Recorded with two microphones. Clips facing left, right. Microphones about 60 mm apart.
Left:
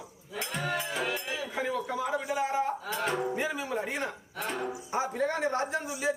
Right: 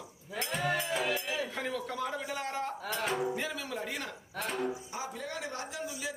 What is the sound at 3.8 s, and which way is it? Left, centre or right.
Speech, left.